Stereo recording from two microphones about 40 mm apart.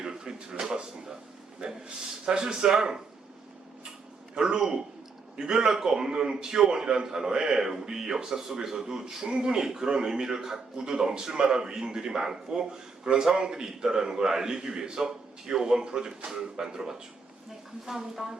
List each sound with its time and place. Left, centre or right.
0.0 s a sound: right
0.6 s a man's voice: centre
2.2 s a man's voice: right
4.4 s a man's voice: centre